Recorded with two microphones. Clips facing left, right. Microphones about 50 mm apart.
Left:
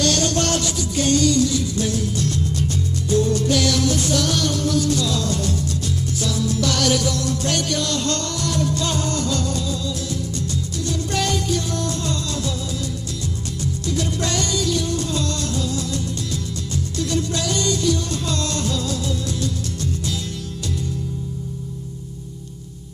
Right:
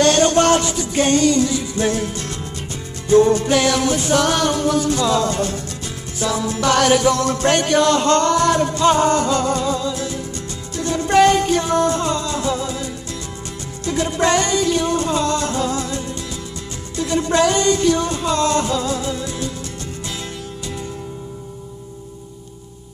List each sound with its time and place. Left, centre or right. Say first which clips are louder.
0.0 s music: right 7 dB; right
13.8 s music: right 8 dB; right
16.9 s music: right 7 dB; right
18.1 s music: right 7 dB; right